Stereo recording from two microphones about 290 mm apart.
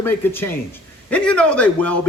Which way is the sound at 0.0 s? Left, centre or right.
Centre.